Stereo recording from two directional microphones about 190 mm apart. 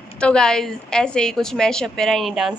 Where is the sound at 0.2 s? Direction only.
5° left (ahead or behind).